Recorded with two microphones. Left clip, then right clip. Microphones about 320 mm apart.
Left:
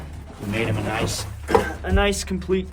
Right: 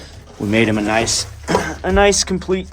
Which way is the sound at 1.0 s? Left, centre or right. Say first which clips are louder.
Right 7 dB; right.